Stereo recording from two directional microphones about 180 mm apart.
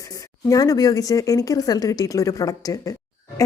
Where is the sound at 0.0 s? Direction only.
20° left (ahead or behind).